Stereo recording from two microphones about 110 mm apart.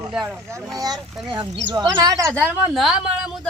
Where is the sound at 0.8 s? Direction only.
35° right (ahead or behind).